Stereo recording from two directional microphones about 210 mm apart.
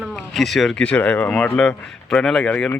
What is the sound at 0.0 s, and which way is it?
Speech, centre (ahead or behind).